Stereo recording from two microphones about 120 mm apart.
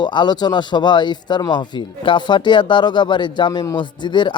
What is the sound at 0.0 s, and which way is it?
Speech, 40° left (ahead or behind).